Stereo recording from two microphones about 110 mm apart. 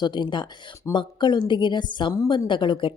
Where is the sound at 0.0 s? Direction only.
45° left (ahead or behind).